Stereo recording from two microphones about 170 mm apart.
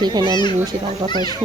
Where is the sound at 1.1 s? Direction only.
25° left (ahead or behind).